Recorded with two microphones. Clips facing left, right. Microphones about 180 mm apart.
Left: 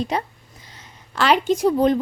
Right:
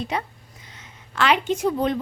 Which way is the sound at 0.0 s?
35° left (ahead or behind).